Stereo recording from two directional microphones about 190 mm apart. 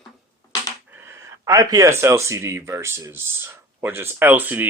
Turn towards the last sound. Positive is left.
turn(degrees=-10)  # may be behind; listen again after turning